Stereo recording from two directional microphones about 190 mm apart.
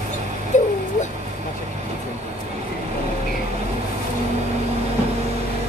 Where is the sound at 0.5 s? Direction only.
40° left (ahead or behind).